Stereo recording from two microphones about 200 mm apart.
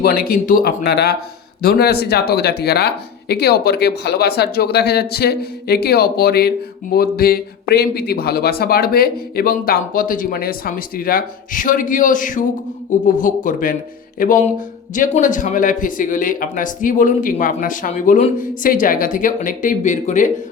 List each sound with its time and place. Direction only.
0.0 s speech: 50° left (ahead or behind)